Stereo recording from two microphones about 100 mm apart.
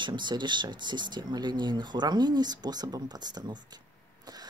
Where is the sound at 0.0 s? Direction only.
50° right (ahead or behind).